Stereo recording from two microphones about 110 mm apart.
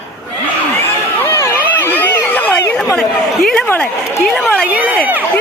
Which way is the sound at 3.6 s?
15° left (ahead or behind).